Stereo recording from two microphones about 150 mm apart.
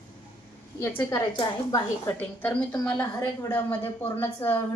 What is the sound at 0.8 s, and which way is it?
A woman's voice, 15° left (ahead or behind).